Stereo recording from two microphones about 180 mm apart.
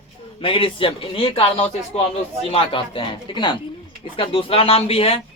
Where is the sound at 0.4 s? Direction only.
30° left (ahead or behind).